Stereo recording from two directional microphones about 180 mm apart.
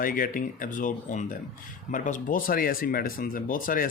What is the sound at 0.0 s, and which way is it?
Speech, 50° left (ahead or behind).